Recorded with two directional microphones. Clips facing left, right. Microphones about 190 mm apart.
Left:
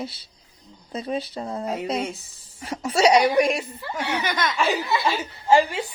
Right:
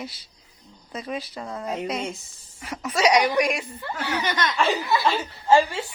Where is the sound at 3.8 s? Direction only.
Centre (ahead or behind).